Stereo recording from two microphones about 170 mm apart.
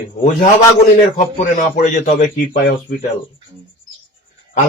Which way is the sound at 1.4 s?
50° left (ahead or behind).